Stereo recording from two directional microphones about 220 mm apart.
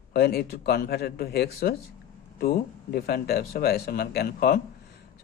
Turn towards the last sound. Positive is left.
turn(degrees=45)  # may be behind; listen again after turning